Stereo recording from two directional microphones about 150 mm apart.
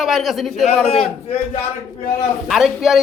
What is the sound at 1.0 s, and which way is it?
Speech, 45° left (ahead or behind).